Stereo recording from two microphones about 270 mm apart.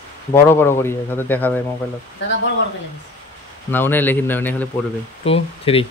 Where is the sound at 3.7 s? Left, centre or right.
Centre.